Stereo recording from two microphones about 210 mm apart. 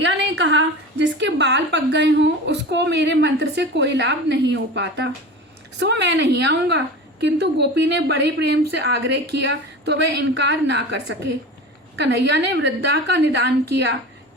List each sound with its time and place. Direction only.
0.0 s a woman's voice: 60° right (ahead or behind)